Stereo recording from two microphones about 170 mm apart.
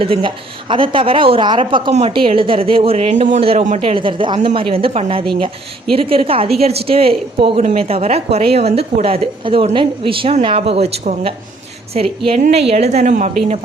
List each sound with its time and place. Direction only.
0.0 s a woman's voice: 30° right (ahead or behind)